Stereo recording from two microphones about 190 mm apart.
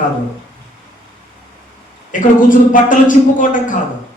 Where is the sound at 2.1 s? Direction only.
45° left (ahead or behind).